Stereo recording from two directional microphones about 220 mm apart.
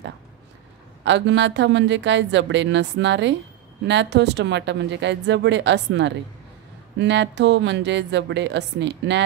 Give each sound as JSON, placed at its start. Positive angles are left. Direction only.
{"t": 1.0, "sound": "speech", "side_deg": -55}